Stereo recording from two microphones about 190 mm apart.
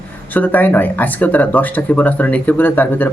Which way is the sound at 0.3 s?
10° left (ahead or behind).